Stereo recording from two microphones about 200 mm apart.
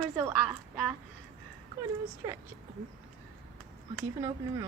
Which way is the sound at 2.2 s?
15° right (ahead or behind).